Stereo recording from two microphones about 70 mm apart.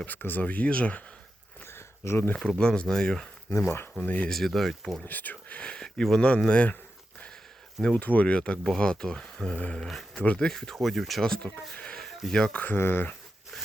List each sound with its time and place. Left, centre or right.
0.0 s speech: left
1.6 s a sound: left
2.3 s speech: centre
4.0 s speech: left
4.3 s speech: centre
5.0 s speech: left
7.9 s speech: left
11.7 s a sound: centre
12.5 s speech: left